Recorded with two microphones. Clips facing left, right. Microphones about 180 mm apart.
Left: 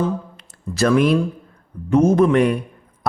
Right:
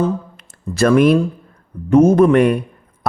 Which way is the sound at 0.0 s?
55° right (ahead or behind).